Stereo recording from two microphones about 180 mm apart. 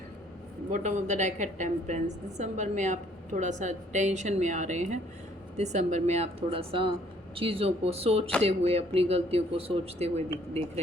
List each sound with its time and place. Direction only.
0.7 s a woman's voice: 40° right (ahead or behind)